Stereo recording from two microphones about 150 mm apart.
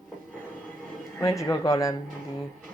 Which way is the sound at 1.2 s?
20° left (ahead or behind).